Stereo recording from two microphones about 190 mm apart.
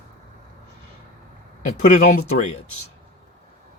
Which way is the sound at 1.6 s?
40° left (ahead or behind).